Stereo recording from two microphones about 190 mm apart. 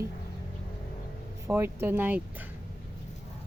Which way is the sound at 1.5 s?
10° right (ahead or behind).